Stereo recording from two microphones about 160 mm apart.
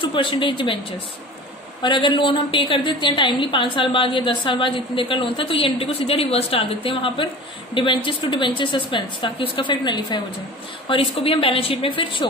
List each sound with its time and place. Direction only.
0.0 s a woman's voice: 30° left (ahead or behind)
1.8 s a woman's voice: 30° left (ahead or behind)